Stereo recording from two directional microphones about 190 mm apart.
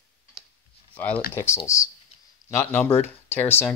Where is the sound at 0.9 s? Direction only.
10° left (ahead or behind).